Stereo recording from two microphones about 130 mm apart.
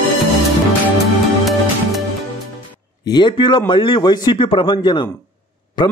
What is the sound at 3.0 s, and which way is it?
A man's voice, 35° left (ahead or behind).